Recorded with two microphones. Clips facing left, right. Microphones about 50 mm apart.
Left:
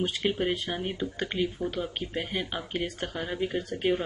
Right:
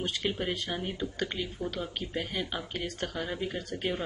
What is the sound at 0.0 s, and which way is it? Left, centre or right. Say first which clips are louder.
Speech: left 4 dB; centre.